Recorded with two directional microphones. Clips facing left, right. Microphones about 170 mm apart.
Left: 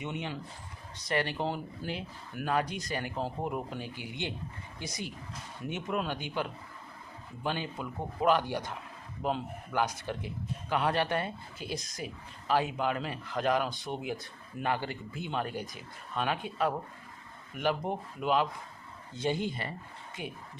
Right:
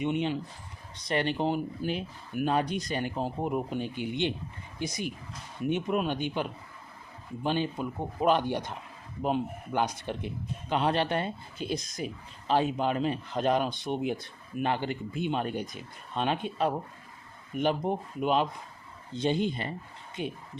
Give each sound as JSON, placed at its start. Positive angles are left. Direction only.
{"t": 0.0, "sound": "a man's voice", "side_deg": -20}